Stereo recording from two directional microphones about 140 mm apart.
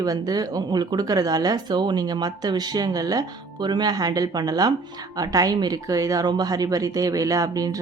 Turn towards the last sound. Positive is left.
turn(degrees=-25)  # may be behind; listen again after turning